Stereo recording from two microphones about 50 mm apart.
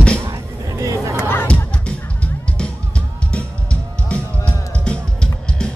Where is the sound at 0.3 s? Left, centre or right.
Right.